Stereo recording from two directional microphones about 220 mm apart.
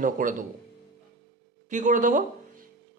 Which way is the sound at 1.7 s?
35° right (ahead or behind).